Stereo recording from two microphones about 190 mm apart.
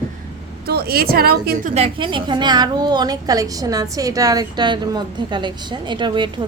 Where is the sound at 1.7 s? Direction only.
30° right (ahead or behind).